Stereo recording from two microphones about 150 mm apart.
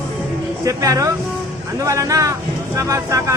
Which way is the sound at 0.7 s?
20° right (ahead or behind).